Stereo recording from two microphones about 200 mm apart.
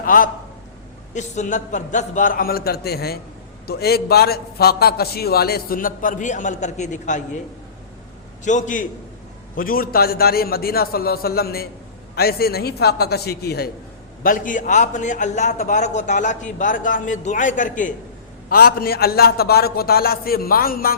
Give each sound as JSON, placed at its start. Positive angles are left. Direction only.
{"t": 0.0, "sound": "a man's voice", "side_deg": 45}
{"t": 8.4, "sound": "a man's voice", "side_deg": 40}
{"t": 14.3, "sound": "a man's voice", "side_deg": 40}